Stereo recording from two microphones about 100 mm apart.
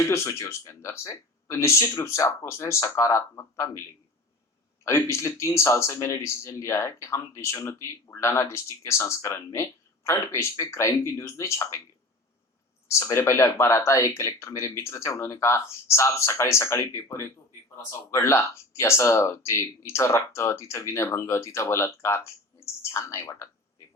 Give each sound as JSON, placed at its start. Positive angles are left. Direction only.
{"t": 0.1, "sound": "speech", "side_deg": 30}
{"t": 4.9, "sound": "speech", "side_deg": 25}
{"t": 12.9, "sound": "speech", "side_deg": 25}